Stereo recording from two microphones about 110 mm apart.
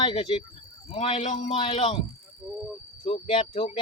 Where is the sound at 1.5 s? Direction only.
50° left (ahead or behind).